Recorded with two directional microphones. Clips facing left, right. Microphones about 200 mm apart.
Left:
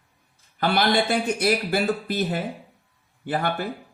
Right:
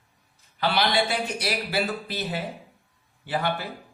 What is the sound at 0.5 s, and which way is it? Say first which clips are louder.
Speech: left 3 dB; 50° left (ahead or behind).